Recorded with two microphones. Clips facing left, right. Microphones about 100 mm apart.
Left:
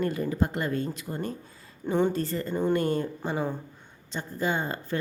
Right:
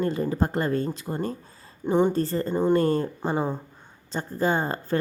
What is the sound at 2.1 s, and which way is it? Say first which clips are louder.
A woman's voice: right 4 dB; 35° right (ahead or behind).